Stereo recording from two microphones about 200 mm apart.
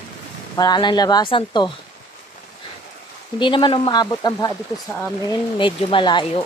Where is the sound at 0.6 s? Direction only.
20° left (ahead or behind).